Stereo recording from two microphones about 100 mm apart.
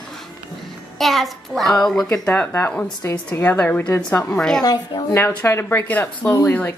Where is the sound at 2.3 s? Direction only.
20° left (ahead or behind).